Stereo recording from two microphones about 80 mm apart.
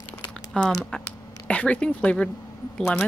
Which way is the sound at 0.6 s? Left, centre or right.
Centre.